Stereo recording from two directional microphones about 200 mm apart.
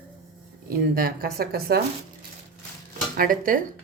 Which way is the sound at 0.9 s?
50° right (ahead or behind).